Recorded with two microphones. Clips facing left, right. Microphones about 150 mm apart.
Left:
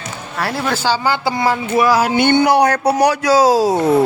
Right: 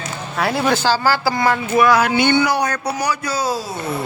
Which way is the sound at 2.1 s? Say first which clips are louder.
Left 4 dB; 55° left (ahead or behind).